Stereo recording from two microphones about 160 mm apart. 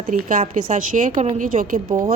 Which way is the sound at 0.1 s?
60° right (ahead or behind).